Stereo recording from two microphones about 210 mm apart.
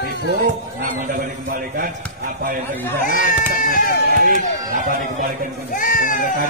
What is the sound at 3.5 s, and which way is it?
Speech, 40° left (ahead or behind).